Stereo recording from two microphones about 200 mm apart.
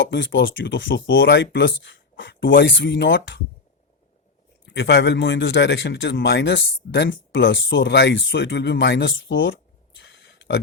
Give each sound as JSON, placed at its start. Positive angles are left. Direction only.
{"t": 0.0, "sound": "speech", "side_deg": 65}
{"t": 4.6, "sound": "speech", "side_deg": 60}
{"t": 10.0, "sound": "a sound", "side_deg": 60}